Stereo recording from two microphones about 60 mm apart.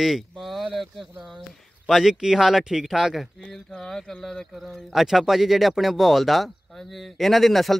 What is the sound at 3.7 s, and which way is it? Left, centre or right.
Speech, centre.